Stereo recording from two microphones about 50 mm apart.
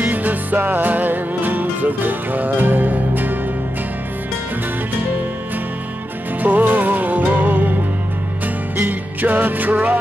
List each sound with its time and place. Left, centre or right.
0.0 s music: right
6.4 s music: right
8.7 s music: right